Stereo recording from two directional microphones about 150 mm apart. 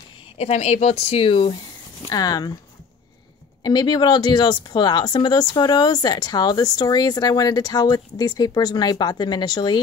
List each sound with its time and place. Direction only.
0.4 s speech: 45° left (ahead or behind)
2.0 s speech: 25° left (ahead or behind)
3.6 s speech: 25° left (ahead or behind)